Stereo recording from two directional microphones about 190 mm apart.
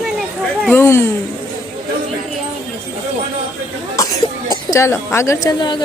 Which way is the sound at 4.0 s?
15° left (ahead or behind).